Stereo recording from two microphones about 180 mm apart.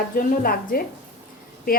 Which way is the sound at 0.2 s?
55° left (ahead or behind).